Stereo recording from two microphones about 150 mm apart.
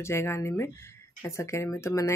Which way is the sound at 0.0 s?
15° left (ahead or behind).